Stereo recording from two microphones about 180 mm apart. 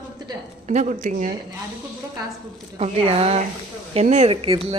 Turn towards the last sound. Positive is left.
turn(degrees=-30)  # may be behind; listen again after turning